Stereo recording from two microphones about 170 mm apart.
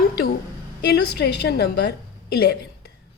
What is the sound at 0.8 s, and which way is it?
A woman's voice, 75° left (ahead or behind).